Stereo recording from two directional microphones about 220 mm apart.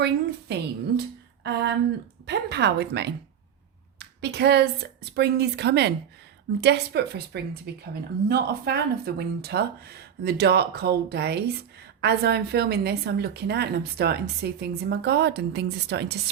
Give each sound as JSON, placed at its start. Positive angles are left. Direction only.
{"t": 0.0, "sound": "a woman's voice", "side_deg": -50}
{"t": 2.2, "sound": "a woman's voice", "side_deg": -50}